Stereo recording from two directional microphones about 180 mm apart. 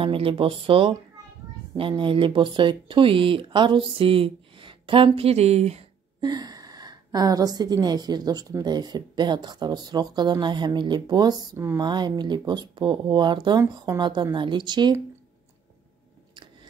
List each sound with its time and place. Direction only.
0.0 s a woman's voice: 30° right (ahead or behind)
6.2 s a woman's voice: 20° right (ahead or behind)